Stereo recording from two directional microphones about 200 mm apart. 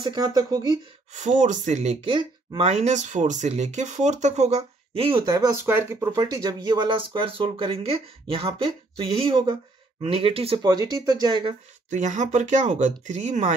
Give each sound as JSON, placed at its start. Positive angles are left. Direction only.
{"t": 0.0, "sound": "speech", "side_deg": -20}
{"t": 1.1, "sound": "speech", "side_deg": -40}
{"t": 11.9, "sound": "speech", "side_deg": -40}